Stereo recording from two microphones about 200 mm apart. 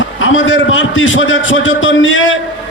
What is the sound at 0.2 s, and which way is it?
A man's voice, 75° left (ahead or behind).